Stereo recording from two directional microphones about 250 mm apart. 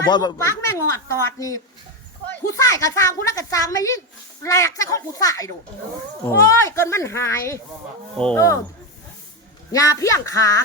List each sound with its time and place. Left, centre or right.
0.1 s a woman's voice: centre
9.7 s a woman's voice: centre